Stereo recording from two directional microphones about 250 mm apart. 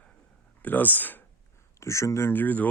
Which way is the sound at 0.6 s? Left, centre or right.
Centre.